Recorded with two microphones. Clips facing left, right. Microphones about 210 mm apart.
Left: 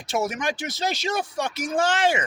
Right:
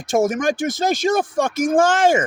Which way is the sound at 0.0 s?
50° right (ahead or behind).